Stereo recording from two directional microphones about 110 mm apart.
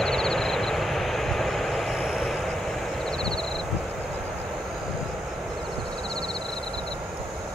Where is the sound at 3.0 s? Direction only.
5° left (ahead or behind).